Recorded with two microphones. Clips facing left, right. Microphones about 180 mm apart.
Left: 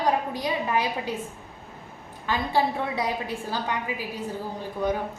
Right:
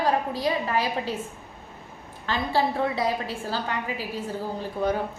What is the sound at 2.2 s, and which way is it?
A woman's voice, 15° left (ahead or behind).